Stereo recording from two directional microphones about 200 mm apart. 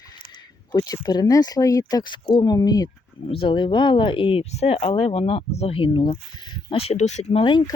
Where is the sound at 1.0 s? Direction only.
20° left (ahead or behind).